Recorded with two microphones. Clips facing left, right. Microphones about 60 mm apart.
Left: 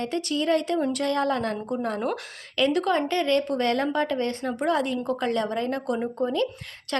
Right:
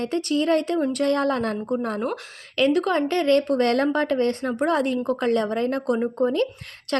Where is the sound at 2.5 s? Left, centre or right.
Right.